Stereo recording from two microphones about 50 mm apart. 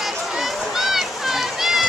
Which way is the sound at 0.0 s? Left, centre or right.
Centre.